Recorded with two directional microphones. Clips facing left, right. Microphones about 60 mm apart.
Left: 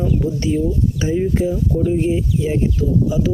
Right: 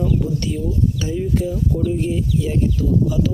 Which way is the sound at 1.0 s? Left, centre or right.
Left.